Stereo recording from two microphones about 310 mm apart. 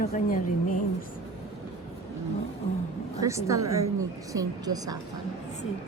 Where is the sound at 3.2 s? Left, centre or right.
Centre.